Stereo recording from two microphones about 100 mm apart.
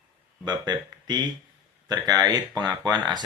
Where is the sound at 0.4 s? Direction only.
45° right (ahead or behind).